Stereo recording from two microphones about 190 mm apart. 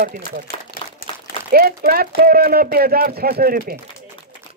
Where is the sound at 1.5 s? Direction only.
50° right (ahead or behind).